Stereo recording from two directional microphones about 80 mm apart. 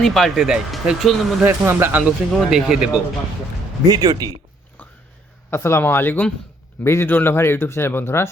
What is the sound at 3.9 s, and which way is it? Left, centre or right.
Speech, right.